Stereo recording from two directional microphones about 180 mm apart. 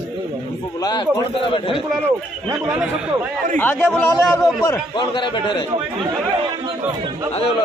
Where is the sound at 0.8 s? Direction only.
20° left (ahead or behind).